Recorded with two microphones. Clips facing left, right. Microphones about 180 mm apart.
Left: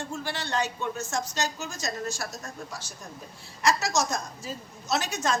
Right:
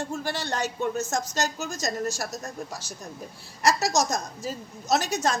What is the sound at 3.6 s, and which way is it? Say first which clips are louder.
A woman's voice: right 2 dB; 40° right (ahead or behind).